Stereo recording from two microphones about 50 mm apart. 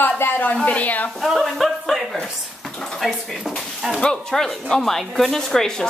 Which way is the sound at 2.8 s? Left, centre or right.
Centre.